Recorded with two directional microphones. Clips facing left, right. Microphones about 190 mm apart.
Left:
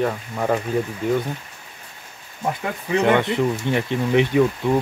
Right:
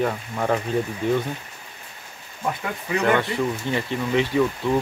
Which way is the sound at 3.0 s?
20° left (ahead or behind).